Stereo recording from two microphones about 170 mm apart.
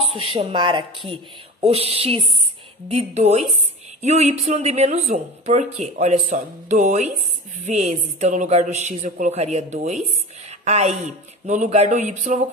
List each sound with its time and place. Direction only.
0.1 s a woman's voice: 30° right (ahead or behind)